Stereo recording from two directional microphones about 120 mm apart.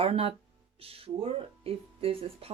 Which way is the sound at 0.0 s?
55° right (ahead or behind).